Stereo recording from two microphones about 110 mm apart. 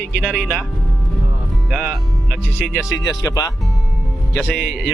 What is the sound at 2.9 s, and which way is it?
Speech, 30° left (ahead or behind).